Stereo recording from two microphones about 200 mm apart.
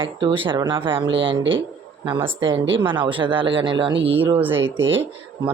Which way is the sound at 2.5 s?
65° right (ahead or behind).